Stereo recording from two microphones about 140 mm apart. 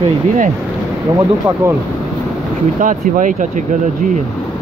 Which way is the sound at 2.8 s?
70° right (ahead or behind).